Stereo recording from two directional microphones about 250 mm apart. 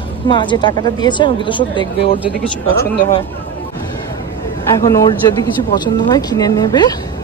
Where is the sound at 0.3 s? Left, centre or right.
Centre.